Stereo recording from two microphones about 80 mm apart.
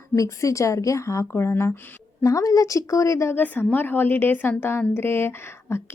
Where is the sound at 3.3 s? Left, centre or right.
Left.